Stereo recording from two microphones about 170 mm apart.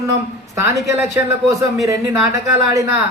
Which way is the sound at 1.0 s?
15° right (ahead or behind).